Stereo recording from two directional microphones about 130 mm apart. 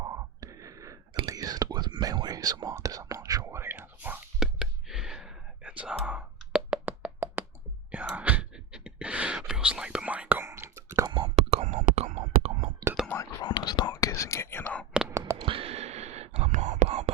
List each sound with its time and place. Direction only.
0.0 s a sound: 25° right (ahead or behind)
1.3 s whispering: 30° right (ahead or behind)
4.4 s whispering: 5° right (ahead or behind)
6.0 s a sound: 10° right (ahead or behind)
7.4 s whispering: 15° right (ahead or behind)
7.9 s gasp: 10° right (ahead or behind)
9.5 s whispering: 5° right (ahead or behind)
11.3 s whispering: 65° right (ahead or behind)
13.4 s whispering: 35° left (ahead or behind); by 14.8 s 15° left (ahead or behind)
15.1 s a sound: 25° right (ahead or behind)
15.4 s whispering: 45° right (ahead or behind); by 17.1 s 70° right (ahead or behind)